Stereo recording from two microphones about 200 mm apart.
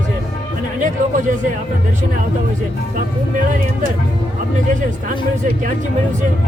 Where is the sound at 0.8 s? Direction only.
40° right (ahead or behind).